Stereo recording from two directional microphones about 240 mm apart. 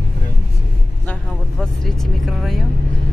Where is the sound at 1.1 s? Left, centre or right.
Centre.